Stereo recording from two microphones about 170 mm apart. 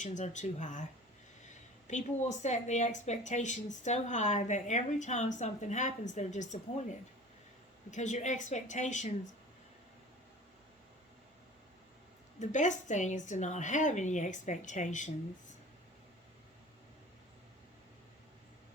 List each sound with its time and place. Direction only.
0.0 s a woman's voice: 45° left (ahead or behind)
1.9 s a woman's voice: 45° left (ahead or behind)
7.9 s a woman's voice: 45° left (ahead or behind)
12.4 s a woman's voice: 45° left (ahead or behind)